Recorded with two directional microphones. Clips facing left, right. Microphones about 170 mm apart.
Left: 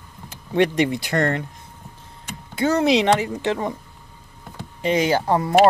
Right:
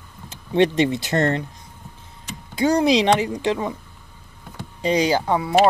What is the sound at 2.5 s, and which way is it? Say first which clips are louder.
Speech: right 1 dB; 15° right (ahead or behind).